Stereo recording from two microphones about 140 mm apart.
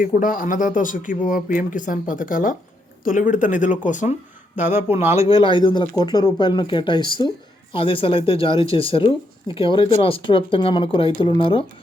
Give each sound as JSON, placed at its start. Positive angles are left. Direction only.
{"t": 0.0, "sound": "a man's voice", "side_deg": 70}
{"t": 4.5, "sound": "speech", "side_deg": -15}
{"t": 5.3, "sound": "speech", "side_deg": 35}